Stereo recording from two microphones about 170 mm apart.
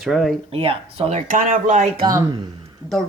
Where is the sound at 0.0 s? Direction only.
Centre (ahead or behind).